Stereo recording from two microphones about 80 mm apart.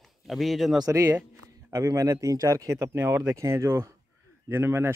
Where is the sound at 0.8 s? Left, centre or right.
Right.